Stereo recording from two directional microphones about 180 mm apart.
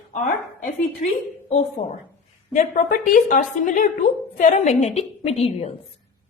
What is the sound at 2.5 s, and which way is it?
A woman's voice, 45° left (ahead or behind).